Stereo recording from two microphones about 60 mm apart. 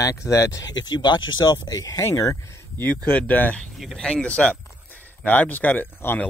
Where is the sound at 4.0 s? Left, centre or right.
Centre.